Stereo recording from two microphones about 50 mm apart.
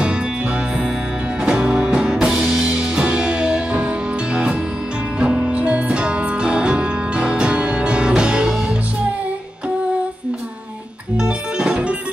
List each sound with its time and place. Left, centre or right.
1.4 s music: centre
2.7 s music: centre
5.2 s music: right
11.1 s music: centre